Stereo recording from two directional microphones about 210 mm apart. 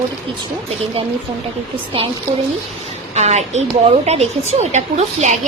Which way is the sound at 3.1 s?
30° right (ahead or behind).